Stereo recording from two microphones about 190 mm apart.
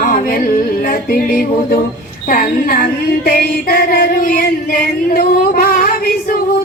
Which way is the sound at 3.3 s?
55° left (ahead or behind).